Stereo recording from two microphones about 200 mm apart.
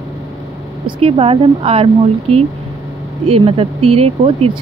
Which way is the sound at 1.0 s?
30° right (ahead or behind).